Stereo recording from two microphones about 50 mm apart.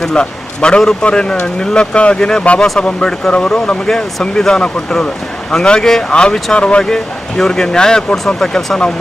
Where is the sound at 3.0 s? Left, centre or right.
Centre.